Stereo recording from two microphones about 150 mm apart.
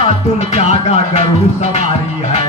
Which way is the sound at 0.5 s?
45° left (ahead or behind).